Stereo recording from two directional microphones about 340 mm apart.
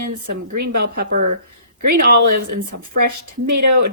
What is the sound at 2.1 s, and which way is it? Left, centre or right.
A woman's voice, right.